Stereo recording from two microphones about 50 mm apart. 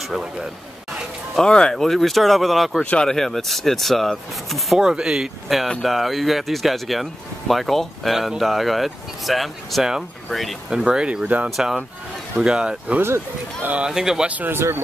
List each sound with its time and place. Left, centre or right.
1.4 s speech: centre
2.8 s speech: left
3.1 s speech: centre
4.7 s speech: centre
10.7 s speech: centre
13.0 s speech: right
13.8 s speech: centre
14.2 s speech: right
14.5 s speech: right